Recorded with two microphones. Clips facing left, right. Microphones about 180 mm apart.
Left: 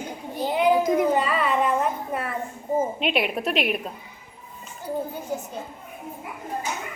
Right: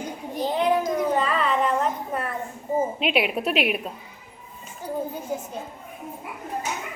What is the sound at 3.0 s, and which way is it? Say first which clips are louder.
Speech: right 1 dB; centre (ahead or behind).